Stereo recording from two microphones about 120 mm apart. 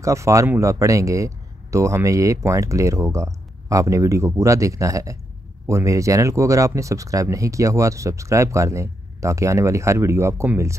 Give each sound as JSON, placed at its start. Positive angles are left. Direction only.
{"t": 0.0, "sound": "speech", "side_deg": -25}